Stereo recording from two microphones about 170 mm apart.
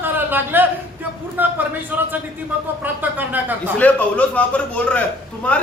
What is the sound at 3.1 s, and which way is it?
Speech, 10° right (ahead or behind).